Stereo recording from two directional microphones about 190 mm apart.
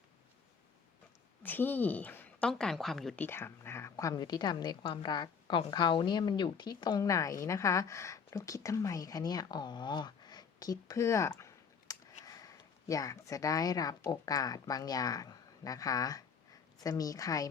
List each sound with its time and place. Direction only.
1.4 s a woman's voice: 10° left (ahead or behind)